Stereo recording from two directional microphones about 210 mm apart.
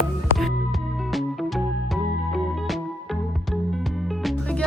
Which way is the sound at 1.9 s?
Centre (ahead or behind).